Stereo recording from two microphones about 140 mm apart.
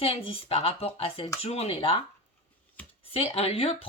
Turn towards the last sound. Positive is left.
turn(degrees=45)  # may be behind; listen again after turning